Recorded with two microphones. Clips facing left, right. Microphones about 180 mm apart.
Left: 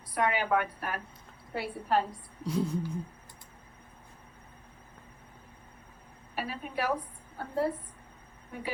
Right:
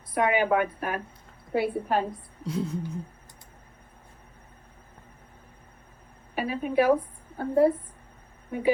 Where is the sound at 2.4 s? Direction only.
25° right (ahead or behind).